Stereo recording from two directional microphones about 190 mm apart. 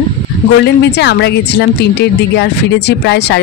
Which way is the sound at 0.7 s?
60° left (ahead or behind).